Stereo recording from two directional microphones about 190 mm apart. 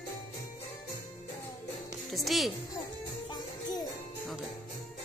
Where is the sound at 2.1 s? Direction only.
Centre (ahead or behind).